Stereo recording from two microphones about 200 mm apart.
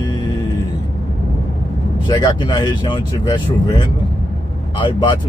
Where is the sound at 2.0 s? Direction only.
20° left (ahead or behind).